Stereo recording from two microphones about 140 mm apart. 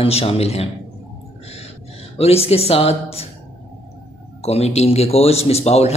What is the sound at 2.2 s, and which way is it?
Speech, 45° left (ahead or behind).